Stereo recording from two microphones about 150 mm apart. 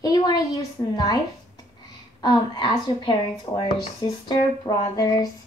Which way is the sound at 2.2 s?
30° left (ahead or behind).